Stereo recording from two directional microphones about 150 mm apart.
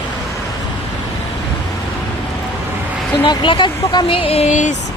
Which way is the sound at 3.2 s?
30° left (ahead or behind).